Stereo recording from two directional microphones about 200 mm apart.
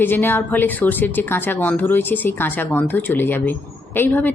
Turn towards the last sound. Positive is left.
turn(degrees=10)  # may be behind; listen again after turning